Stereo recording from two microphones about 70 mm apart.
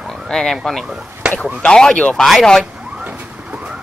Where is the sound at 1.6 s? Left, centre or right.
Centre.